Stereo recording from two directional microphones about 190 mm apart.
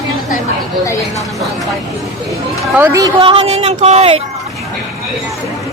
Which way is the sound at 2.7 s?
10° right (ahead or behind).